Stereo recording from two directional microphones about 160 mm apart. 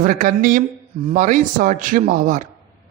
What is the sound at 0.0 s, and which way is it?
A man's voice, 55° right (ahead or behind).